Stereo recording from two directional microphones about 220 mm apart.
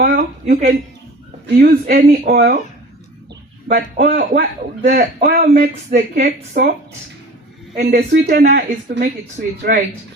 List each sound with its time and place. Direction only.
0.0 s a sound: 35° right (ahead or behind)
1.6 s speech: 40° right (ahead or behind)
3.7 s a man's voice: 45° right (ahead or behind)
7.8 s a man's voice: 45° right (ahead or behind)